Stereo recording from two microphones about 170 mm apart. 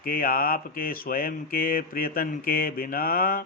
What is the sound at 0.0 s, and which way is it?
A man's voice, 55° left (ahead or behind).